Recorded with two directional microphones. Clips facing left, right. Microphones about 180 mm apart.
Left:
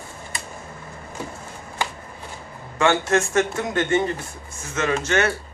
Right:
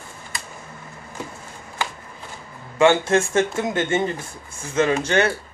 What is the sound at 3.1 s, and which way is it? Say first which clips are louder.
Speech: right 1 dB; 25° right (ahead or behind).